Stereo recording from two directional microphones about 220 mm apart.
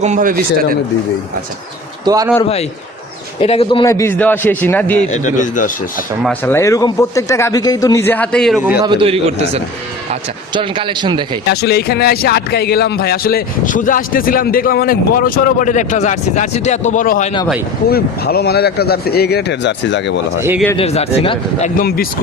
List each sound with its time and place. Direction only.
0.0 s speech: 35° right (ahead or behind)
2.0 s a man's voice: 15° right (ahead or behind)
3.4 s speech: 25° left (ahead or behind); by 4.9 s 10° left (ahead or behind)
5.1 s speech: 35° left (ahead or behind)
6.2 s speech: 10° left (ahead or behind)
8.8 s a man's voice: 20° right (ahead or behind)
11.4 s speech: 45° left (ahead or behind)
20.7 s a man's voice: 30° left (ahead or behind)
21.8 s speech: 45° left (ahead or behind)